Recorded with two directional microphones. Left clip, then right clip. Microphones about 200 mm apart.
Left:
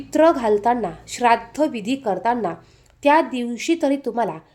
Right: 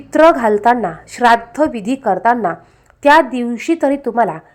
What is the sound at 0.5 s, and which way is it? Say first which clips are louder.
A woman's voice: right 6 dB; 10° right (ahead or behind).